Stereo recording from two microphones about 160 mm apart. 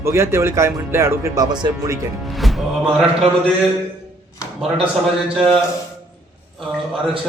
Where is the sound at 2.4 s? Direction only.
Centre (ahead or behind).